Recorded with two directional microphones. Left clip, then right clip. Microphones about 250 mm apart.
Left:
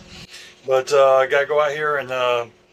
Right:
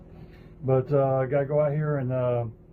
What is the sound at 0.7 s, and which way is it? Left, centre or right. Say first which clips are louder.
Speech: left 9 dB; centre.